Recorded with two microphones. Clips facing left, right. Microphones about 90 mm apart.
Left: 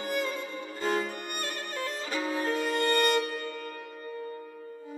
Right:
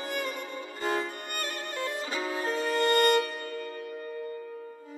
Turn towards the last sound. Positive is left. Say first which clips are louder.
# right 2 dB
turn(degrees=-25)  # may be behind; listen again after turning